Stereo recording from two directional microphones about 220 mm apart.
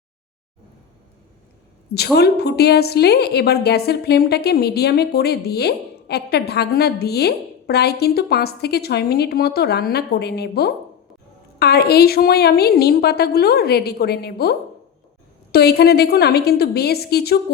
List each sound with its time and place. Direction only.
2.1 s a woman's voice: 45° left (ahead or behind)
15.5 s a woman's voice: 45° left (ahead or behind)